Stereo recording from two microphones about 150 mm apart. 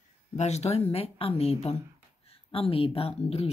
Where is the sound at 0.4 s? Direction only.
50° left (ahead or behind).